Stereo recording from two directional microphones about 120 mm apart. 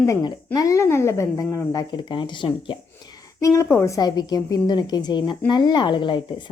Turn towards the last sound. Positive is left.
turn(degrees=40)  # may be behind; listen again after turning